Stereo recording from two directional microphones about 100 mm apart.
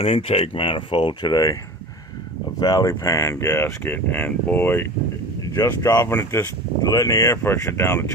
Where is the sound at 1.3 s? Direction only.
35° left (ahead or behind).